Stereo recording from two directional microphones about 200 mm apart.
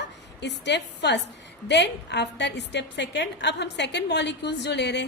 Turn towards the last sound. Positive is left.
turn(degrees=60)  # may be behind; listen again after turning